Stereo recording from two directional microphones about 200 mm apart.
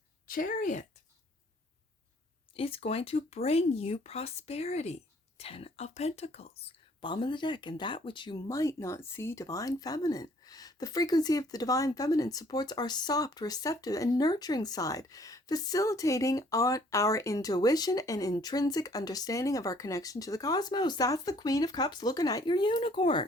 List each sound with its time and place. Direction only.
0.3 s speech: 45° left (ahead or behind)
2.6 s speech: 30° left (ahead or behind)